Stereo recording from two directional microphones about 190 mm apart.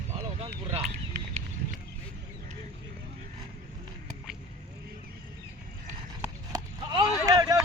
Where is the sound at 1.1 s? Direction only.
60° right (ahead or behind).